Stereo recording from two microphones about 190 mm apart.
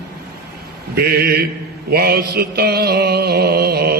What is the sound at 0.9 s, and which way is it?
Mantra, 55° right (ahead or behind).